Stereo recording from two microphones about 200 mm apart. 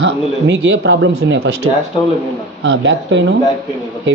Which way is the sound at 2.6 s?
65° right (ahead or behind).